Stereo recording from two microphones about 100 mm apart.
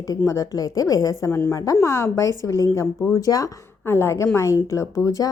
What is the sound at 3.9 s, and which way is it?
A woman's voice, 25° left (ahead or behind).